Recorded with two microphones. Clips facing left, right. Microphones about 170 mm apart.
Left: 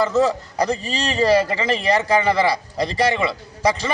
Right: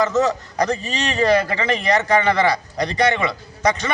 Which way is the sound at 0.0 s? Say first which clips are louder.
Even; 30° left (ahead or behind).